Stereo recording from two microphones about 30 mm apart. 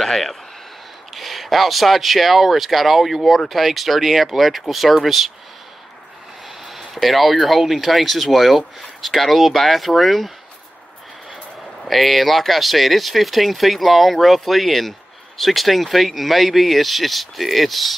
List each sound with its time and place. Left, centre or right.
1.1 s speech: centre
7.0 s speech: centre
11.8 s speech: centre